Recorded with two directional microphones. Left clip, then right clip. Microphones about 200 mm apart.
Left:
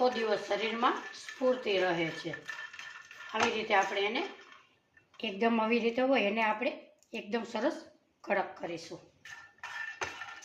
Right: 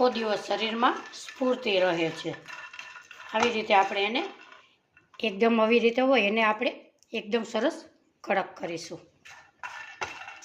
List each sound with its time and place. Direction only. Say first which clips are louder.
0.0 s speech: right 4 dB; 60° right (ahead or behind)
3.7 s speech: right 6 dB; 55° right (ahead or behind)
5.1 s a woman's voice: right 6 dB; 40° right (ahead or behind)